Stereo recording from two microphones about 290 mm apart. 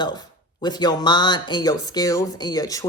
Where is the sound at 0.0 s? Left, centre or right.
Centre.